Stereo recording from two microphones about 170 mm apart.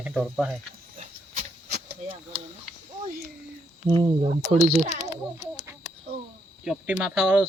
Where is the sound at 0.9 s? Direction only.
40° right (ahead or behind).